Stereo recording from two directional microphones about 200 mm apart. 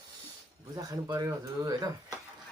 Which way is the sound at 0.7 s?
20° right (ahead or behind).